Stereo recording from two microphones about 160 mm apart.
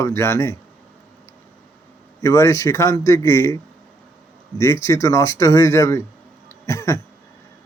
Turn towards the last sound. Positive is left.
turn(degrees=20)  # may be behind; listen again after turning